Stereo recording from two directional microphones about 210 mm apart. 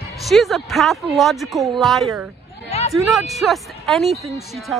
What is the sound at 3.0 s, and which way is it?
Speech, centre (ahead or behind).